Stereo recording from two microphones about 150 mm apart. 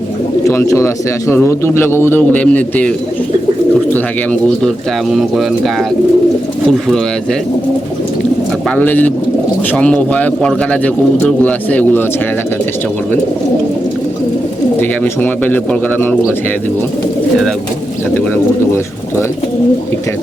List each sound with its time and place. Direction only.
0.4 s speech: 20° left (ahead or behind)
3.9 s speech: 10° left (ahead or behind)
5.1 s speech: centre (ahead or behind)
8.7 s speech: 10° left (ahead or behind)
14.8 s speech: 10° left (ahead or behind)